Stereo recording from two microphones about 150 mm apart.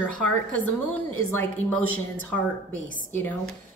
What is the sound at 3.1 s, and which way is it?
Speech, 10° left (ahead or behind).